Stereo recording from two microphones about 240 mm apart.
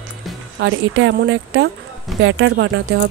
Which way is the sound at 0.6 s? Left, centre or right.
Right.